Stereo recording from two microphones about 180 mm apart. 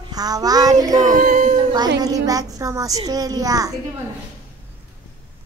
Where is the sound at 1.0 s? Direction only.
50° right (ahead or behind).